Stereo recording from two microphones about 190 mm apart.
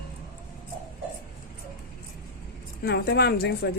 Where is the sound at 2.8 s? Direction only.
55° left (ahead or behind).